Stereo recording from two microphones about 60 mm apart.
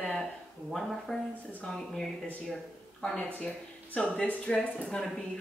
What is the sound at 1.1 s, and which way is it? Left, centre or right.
Speech, centre.